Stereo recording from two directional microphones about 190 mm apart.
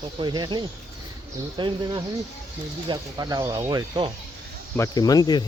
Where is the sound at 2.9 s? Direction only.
20° right (ahead or behind).